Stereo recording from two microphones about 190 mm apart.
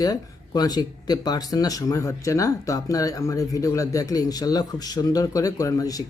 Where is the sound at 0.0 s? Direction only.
20° left (ahead or behind).